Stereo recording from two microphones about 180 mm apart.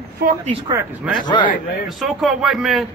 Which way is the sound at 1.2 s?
25° left (ahead or behind).